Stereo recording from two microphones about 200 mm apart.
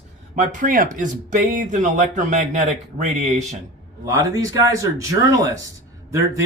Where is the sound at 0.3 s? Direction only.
40° right (ahead or behind).